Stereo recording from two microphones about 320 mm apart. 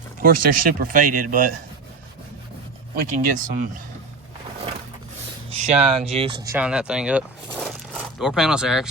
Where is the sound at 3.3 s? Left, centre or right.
Right.